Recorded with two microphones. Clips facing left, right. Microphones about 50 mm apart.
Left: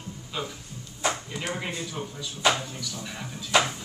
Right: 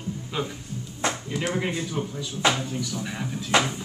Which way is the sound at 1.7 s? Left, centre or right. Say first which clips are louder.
Right 5 dB; centre.